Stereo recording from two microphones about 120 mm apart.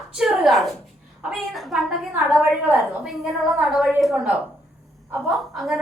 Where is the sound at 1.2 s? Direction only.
Centre (ahead or behind).